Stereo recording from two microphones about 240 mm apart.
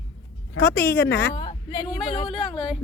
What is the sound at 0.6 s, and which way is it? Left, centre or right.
Speech, centre.